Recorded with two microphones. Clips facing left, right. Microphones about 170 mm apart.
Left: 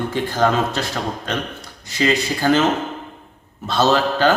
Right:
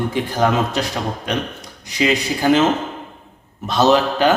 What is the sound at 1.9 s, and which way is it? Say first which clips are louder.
Speech: right 1 dB; 15° right (ahead or behind).